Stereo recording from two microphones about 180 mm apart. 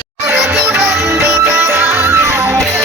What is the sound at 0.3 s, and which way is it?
Music, 15° right (ahead or behind).